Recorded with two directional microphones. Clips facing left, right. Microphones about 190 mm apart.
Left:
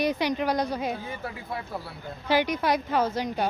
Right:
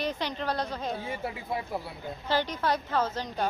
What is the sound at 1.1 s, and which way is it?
Speech, 25° right (ahead or behind).